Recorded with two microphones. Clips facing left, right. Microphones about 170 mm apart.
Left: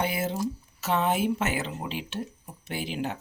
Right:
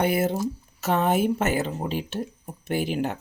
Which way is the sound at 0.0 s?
55° right (ahead or behind).